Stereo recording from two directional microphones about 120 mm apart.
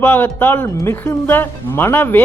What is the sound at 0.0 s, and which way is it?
A woman's voice, 15° left (ahead or behind).